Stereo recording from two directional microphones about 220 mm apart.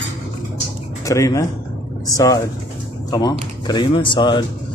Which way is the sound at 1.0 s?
15° left (ahead or behind).